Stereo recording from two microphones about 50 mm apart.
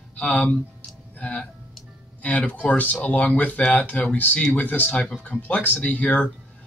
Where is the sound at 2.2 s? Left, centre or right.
Left.